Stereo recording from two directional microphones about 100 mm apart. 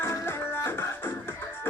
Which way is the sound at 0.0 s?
25° left (ahead or behind).